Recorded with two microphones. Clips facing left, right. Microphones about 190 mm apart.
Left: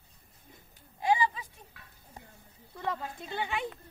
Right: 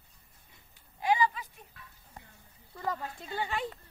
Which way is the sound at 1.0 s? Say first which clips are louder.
Even; 25° left (ahead or behind).